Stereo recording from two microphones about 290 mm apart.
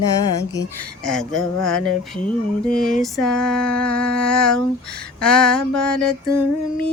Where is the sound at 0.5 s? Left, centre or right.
Centre.